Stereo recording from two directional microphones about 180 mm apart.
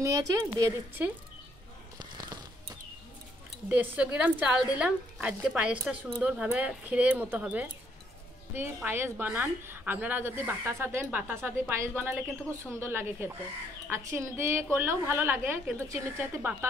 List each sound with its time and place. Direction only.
0.0 s a woman's voice: 20° right (ahead or behind)
2.0 s a sound: 20° right (ahead or behind)
3.6 s a woman's voice: 10° right (ahead or behind)